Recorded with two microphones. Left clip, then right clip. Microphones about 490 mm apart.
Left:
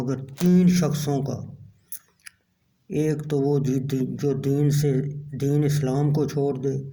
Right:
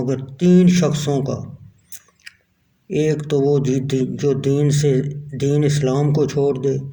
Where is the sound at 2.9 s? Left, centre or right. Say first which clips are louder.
Right 6 dB; left.